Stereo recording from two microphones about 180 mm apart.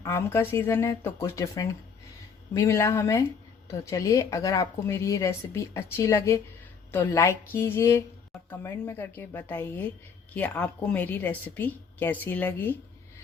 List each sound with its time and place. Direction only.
0.0 s speech: 15° left (ahead or behind)